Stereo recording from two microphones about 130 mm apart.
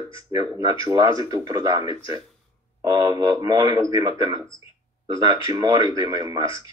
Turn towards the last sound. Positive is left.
turn(degrees=-30)  # may be behind; listen again after turning